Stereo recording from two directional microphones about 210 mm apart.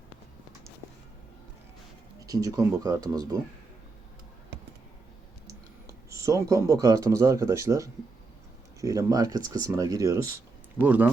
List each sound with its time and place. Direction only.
2.2 s speech: 15° right (ahead or behind)
6.1 s speech: 15° right (ahead or behind)